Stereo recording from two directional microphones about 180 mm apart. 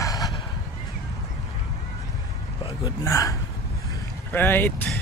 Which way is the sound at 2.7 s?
20° left (ahead or behind).